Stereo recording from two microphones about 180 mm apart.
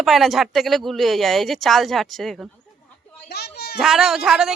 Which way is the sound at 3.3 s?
65° left (ahead or behind).